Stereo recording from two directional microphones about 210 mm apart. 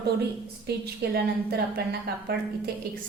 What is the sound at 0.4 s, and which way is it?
A woman's voice, 50° right (ahead or behind).